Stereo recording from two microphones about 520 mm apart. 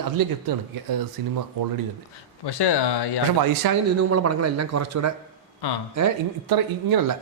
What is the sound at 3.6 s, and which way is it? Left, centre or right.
Speech, right.